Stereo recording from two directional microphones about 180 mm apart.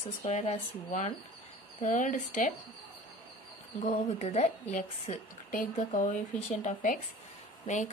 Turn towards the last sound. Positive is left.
turn(degrees=40)  # may be behind; listen again after turning